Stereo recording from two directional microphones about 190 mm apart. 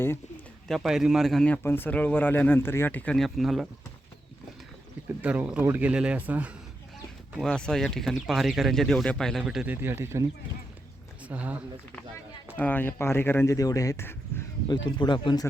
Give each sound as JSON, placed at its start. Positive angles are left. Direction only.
{"t": 0.7, "sound": "speech", "side_deg": 0}
{"t": 5.2, "sound": "speech", "side_deg": -5}
{"t": 7.3, "sound": "speech", "side_deg": 5}
{"t": 11.3, "sound": "speech", "side_deg": -10}
{"t": 12.5, "sound": "speech", "side_deg": 10}
{"t": 14.8, "sound": "speech", "side_deg": 25}